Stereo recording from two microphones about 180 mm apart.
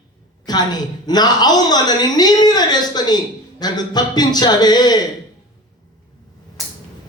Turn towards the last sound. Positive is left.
turn(degrees=0)  # may be behind; listen again after turning